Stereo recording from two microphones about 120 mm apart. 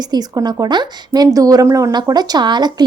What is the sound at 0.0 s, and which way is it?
Speech, 35° right (ahead or behind).